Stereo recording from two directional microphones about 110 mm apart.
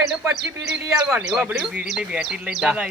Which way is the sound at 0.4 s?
5° right (ahead or behind).